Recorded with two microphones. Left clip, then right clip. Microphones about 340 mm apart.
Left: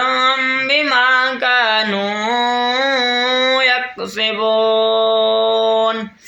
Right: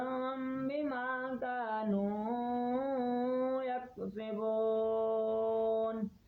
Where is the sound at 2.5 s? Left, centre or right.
Right.